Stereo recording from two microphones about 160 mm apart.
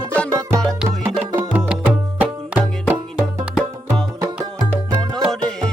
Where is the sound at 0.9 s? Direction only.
15° right (ahead or behind).